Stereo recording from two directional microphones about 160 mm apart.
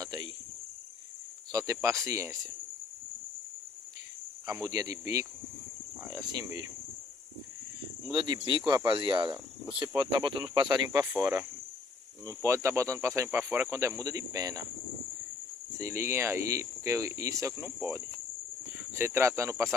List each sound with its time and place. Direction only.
0.0 s cricket: 25° right (ahead or behind)
1.5 s speech: 20° right (ahead or behind)
4.5 s speech: 20° right (ahead or behind)
8.1 s speech: 25° right (ahead or behind)
9.7 s speech: 10° right (ahead or behind)
10.1 s speech: 30° right (ahead or behind)
15.8 s speech: 15° right (ahead or behind)